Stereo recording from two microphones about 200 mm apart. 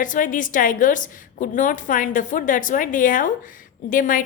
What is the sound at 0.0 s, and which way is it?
A woman's voice, 40° left (ahead or behind).